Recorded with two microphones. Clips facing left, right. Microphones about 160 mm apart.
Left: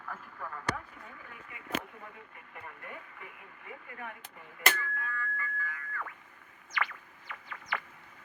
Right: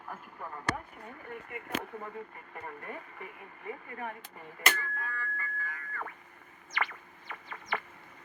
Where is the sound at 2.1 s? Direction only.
40° right (ahead or behind).